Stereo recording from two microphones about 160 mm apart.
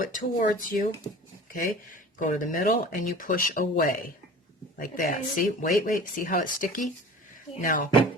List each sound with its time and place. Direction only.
0.0 s speech: 60° left (ahead or behind)